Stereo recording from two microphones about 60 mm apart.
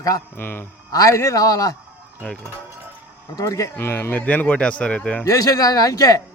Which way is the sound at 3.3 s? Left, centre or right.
Left.